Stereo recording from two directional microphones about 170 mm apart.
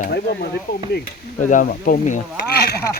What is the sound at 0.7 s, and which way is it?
Speech, 65° left (ahead or behind).